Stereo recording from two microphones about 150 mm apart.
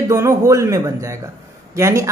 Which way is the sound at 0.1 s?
20° right (ahead or behind).